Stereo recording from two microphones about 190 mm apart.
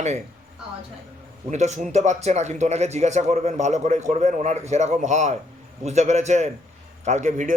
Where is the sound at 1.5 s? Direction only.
40° right (ahead or behind).